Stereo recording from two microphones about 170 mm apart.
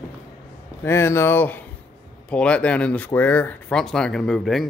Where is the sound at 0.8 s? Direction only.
15° left (ahead or behind).